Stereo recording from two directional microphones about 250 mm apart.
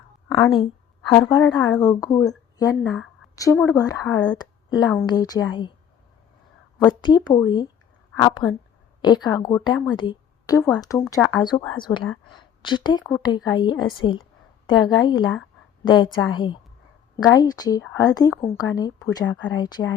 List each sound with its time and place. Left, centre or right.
0.3 s a sound: centre
1.1 s a woman's voice: centre
3.5 s speech: centre
3.8 s a woman's voice: centre
6.7 s a woman's voice: centre
9.9 s a sound: centre
10.7 s a woman's voice: centre